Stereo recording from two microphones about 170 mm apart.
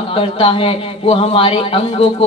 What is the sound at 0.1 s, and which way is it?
Speech, 30° left (ahead or behind).